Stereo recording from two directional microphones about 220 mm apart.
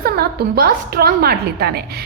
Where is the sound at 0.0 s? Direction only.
45° right (ahead or behind).